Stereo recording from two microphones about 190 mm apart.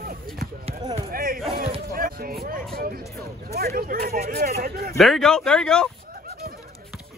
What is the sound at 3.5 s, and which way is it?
Speech, 55° right (ahead or behind).